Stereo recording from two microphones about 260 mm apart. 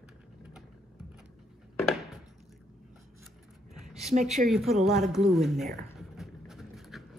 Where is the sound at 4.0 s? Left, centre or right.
Right.